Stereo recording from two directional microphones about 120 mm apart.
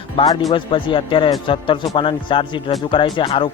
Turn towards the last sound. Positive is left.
turn(degrees=45)  # may be behind; listen again after turning